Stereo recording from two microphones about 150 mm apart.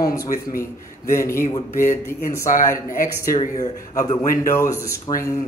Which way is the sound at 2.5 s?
65° left (ahead or behind).